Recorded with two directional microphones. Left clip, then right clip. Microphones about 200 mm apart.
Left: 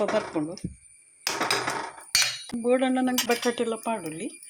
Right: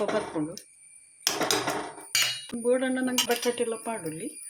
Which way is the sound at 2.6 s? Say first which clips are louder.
Left 2 dB; 15° left (ahead or behind).